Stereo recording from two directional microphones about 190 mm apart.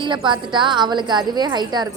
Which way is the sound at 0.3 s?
25° right (ahead or behind).